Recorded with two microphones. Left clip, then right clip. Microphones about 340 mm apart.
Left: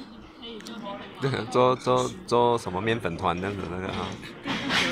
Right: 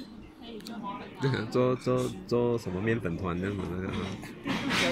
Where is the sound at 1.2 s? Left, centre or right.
Centre.